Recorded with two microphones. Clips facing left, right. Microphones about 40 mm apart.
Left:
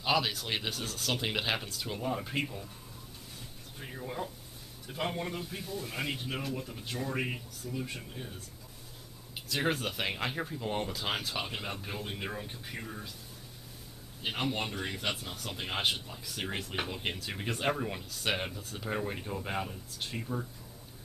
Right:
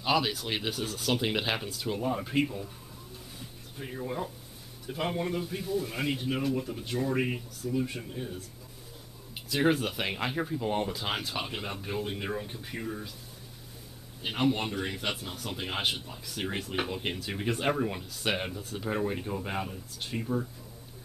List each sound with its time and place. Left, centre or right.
0.0 s speech: centre
3.3 s a sound: centre
4.8 s speech: centre
14.2 s speech: centre